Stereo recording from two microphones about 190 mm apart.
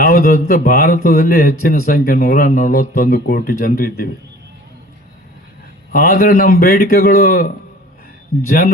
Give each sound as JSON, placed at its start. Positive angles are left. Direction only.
{"t": 0.0, "sound": "speech", "side_deg": 55}
{"t": 5.9, "sound": "speech", "side_deg": 50}